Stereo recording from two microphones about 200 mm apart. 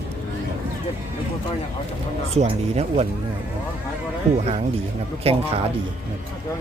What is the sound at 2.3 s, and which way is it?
Speech, 30° right (ahead or behind).